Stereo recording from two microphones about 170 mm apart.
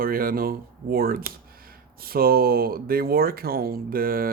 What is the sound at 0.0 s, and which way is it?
Speech, 55° right (ahead or behind).